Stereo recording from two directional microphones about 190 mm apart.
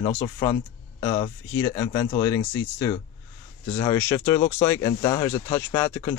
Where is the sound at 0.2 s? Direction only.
20° left (ahead or behind).